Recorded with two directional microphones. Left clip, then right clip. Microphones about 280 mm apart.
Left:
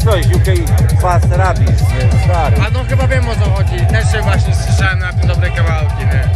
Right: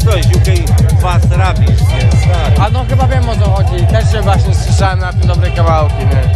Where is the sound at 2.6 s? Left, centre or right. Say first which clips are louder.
Right 4 dB; centre.